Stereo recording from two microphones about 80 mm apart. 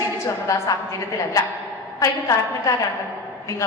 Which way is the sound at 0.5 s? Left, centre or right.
Left.